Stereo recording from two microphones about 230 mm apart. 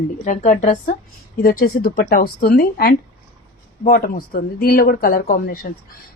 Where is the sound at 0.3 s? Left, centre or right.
Left.